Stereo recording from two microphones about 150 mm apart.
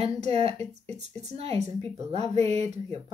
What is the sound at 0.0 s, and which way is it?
Speech, 45° right (ahead or behind).